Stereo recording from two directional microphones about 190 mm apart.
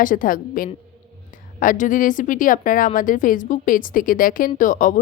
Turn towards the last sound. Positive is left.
turn(degrees=45)  # may be behind; listen again after turning